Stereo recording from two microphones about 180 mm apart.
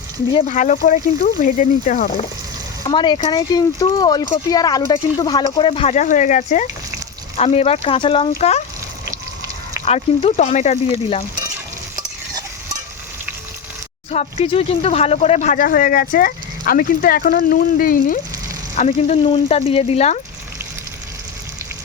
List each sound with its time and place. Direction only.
0.3 s speech: 40° left (ahead or behind)
2.8 s speech: 25° left (ahead or behind)
9.8 s speech: 35° left (ahead or behind)
14.1 s speech: 35° left (ahead or behind); by 18.2 s 50° left (ahead or behind)
18.8 s speech: 40° left (ahead or behind)